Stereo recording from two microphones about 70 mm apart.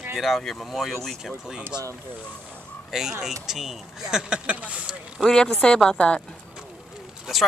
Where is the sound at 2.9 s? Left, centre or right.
Centre.